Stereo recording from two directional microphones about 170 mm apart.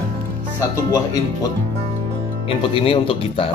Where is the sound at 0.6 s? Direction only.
20° left (ahead or behind).